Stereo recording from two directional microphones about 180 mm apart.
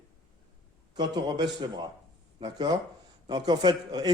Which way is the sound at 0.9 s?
25° right (ahead or behind).